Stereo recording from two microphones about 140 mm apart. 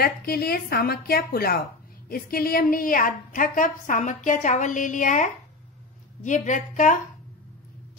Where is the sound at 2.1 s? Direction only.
90° left; by 7.0 s 65° left (ahead or behind).